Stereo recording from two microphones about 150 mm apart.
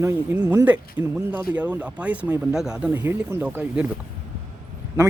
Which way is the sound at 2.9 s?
15° right (ahead or behind).